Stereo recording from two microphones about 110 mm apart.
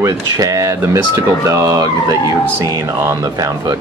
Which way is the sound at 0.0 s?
30° right (ahead or behind).